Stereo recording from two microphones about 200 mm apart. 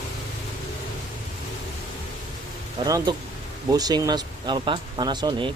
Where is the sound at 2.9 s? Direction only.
15° right (ahead or behind).